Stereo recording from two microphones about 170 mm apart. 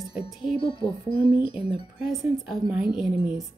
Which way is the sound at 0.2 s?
30° left (ahead or behind).